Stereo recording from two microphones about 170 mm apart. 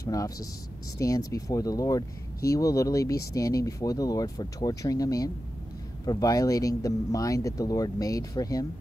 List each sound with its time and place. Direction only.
0.0 s speech: 20° left (ahead or behind)